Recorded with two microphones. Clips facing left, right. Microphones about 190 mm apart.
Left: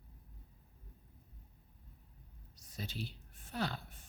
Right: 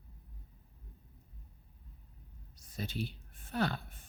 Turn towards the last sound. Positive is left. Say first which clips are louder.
# right 5 dB
turn(degrees=-55)  # may be behind; listen again after turning